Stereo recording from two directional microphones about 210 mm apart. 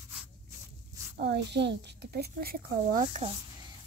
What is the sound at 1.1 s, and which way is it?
A woman's voice, 55° right (ahead or behind).